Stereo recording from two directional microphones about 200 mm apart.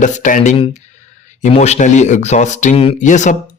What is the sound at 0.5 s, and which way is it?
Speech, 30° left (ahead or behind).